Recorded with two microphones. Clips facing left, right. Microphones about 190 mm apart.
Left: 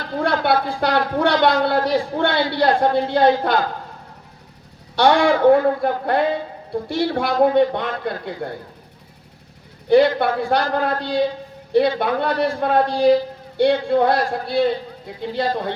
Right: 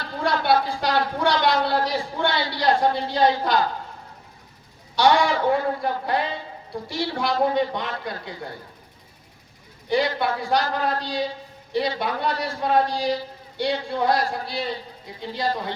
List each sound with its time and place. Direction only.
0.0 s a woman's voice: 55° left (ahead or behind)
4.9 s a woman's voice: 60° left (ahead or behind)
9.9 s a woman's voice: 55° left (ahead or behind)